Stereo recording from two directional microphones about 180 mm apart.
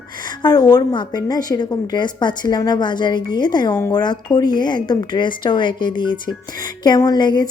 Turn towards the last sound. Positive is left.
turn(degrees=25)  # may be behind; listen again after turning